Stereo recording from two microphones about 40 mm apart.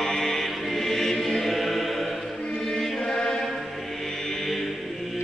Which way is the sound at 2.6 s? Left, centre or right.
Centre.